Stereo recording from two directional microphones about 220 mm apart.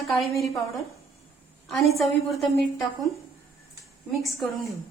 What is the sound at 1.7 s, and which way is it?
A woman's voice, centre (ahead or behind).